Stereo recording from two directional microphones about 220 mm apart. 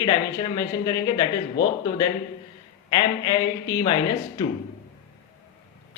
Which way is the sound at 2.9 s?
15° left (ahead or behind).